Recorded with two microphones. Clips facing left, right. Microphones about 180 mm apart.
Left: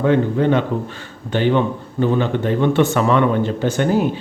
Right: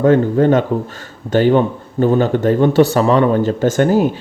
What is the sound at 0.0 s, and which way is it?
A man's voice, 45° right (ahead or behind).